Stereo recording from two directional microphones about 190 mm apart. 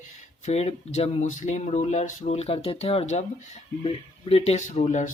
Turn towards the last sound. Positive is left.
turn(degrees=40)  # may be behind; listen again after turning